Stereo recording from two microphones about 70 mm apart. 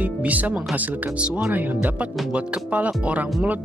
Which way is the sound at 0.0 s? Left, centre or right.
Right.